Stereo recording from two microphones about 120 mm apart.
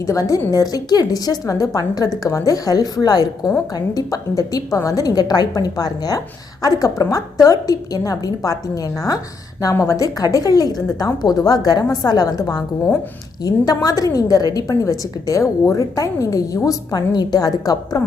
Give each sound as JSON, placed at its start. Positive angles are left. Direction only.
{"t": 0.0, "sound": "a woman's voice", "side_deg": 25}